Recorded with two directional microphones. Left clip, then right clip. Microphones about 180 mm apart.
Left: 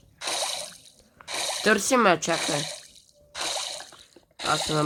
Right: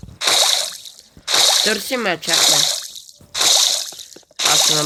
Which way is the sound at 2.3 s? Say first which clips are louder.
Right 12 dB; 20° right (ahead or behind).